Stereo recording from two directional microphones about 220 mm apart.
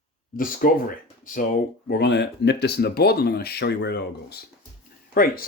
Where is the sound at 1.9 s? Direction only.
50° left (ahead or behind).